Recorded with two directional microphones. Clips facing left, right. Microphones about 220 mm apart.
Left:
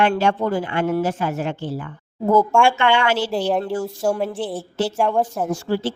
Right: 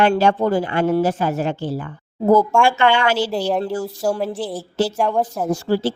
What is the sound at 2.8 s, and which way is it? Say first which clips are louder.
Speech: right 2 dB; 40° right (ahead or behind).